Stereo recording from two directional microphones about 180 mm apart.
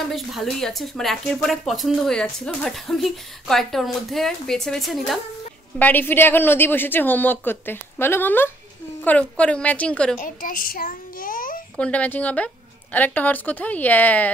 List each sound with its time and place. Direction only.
0.1 s a woman's voice: centre (ahead or behind)
10.2 s a child's voice: 50° left (ahead or behind)
11.7 s a woman's voice: 5° left (ahead or behind)